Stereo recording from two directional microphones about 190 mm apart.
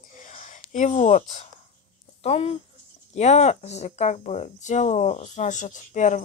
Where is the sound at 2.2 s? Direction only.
30° left (ahead or behind).